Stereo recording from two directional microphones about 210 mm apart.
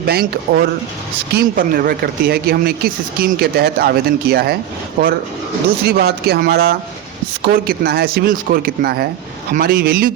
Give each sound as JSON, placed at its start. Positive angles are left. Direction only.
{"t": 0.0, "sound": "speech", "side_deg": -50}
{"t": 5.8, "sound": "speech", "side_deg": -50}